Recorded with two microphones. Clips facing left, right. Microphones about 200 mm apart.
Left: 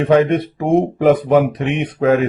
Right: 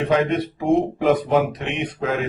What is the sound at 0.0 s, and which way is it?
Speech, 55° left (ahead or behind).